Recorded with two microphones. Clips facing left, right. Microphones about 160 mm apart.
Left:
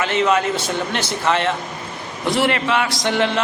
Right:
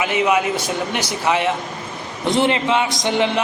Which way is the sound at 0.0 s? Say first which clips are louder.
Even; 10° right (ahead or behind).